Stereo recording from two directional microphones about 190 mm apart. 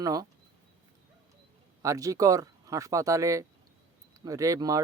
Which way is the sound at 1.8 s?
15° right (ahead or behind).